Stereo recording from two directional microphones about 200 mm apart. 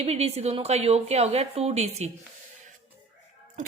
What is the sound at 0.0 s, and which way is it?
A woman's voice, 30° right (ahead or behind).